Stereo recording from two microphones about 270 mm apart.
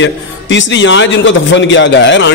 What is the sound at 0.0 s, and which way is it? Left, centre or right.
A man's voice, left.